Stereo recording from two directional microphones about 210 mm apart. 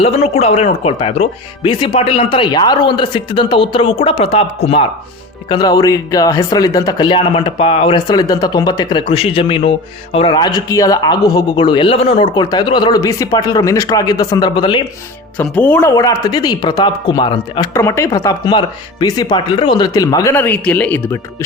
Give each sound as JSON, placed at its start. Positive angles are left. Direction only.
{"t": 0.0, "sound": "speech", "side_deg": 30}
{"t": 5.5, "sound": "speech", "side_deg": 20}
{"t": 15.4, "sound": "speech", "side_deg": 5}